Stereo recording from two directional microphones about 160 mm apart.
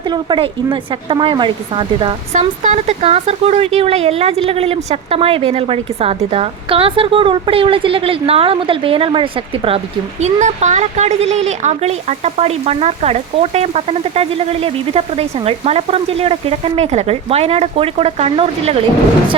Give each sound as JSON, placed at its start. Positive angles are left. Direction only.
{"t": 0.1, "sound": "speech", "side_deg": -30}
{"t": 2.3, "sound": "speech", "side_deg": -45}